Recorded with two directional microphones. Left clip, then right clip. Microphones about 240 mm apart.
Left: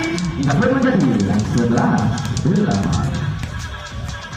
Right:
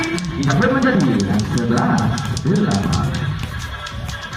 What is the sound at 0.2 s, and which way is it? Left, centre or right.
Speech, left.